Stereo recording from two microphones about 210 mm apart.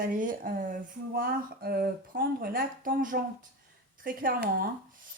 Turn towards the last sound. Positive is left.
turn(degrees=-40)  # may be behind; listen again after turning